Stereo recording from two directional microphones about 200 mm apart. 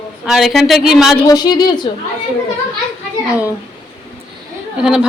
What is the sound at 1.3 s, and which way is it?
Speech, 20° left (ahead or behind).